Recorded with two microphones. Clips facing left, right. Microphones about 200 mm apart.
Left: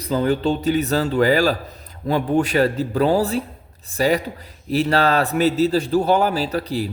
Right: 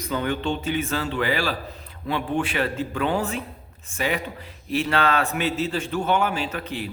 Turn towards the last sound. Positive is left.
turn(degrees=35)  # may be behind; listen again after turning